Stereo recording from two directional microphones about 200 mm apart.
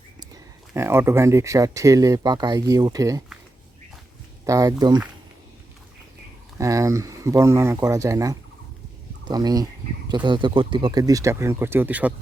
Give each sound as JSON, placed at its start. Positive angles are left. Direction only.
{"t": 0.7, "sound": "speech", "side_deg": -10}
{"t": 4.4, "sound": "speech", "side_deg": -15}
{"t": 6.6, "sound": "speech", "side_deg": -15}